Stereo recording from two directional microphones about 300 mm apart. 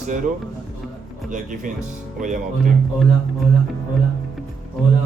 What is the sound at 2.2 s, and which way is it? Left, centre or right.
Speech, right.